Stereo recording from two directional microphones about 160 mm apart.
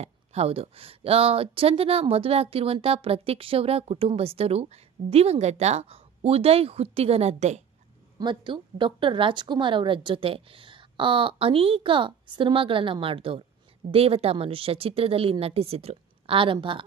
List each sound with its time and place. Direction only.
0.0 s speech: 40° right (ahead or behind)
8.2 s speech: 30° right (ahead or behind)